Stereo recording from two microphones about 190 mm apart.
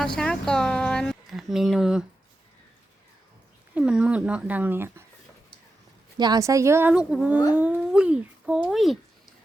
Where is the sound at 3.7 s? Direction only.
5° right (ahead or behind).